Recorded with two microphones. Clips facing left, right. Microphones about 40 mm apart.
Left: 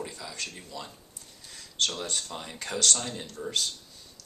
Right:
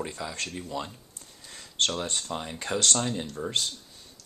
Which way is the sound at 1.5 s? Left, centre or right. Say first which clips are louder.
Right 2 dB; right.